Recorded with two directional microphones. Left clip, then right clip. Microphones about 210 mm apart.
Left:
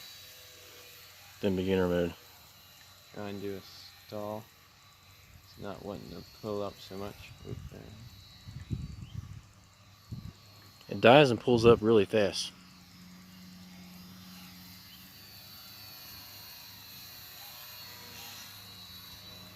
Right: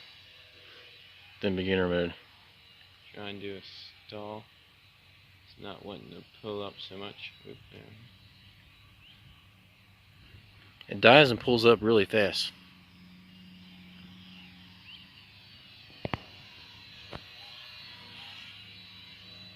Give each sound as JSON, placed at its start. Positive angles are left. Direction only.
{"t": 1.4, "sound": "speech", "side_deg": 5}
{"t": 3.2, "sound": "speech", "side_deg": 60}
{"t": 5.9, "sound": "speech", "side_deg": 55}
{"t": 10.8, "sound": "speech", "side_deg": 5}
{"t": 17.2, "sound": "a sound", "side_deg": 20}